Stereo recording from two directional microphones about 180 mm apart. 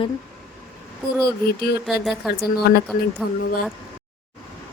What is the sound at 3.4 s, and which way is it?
Speech, 55° left (ahead or behind).